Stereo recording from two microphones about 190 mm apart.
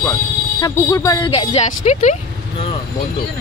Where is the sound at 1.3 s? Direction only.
40° left (ahead or behind).